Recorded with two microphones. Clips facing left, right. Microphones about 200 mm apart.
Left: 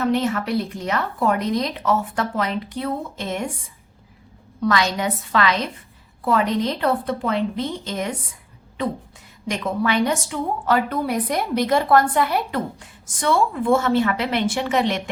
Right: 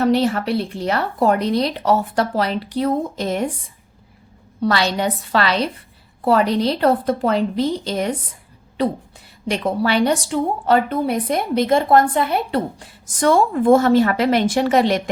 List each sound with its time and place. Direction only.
0.0 s a woman's voice: 35° right (ahead or behind)
4.6 s a woman's voice: 30° right (ahead or behind)